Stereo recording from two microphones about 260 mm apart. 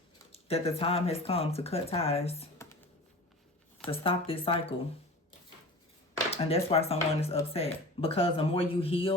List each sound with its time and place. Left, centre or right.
0.3 s speech: left
4.0 s speech: left
6.3 s speech: left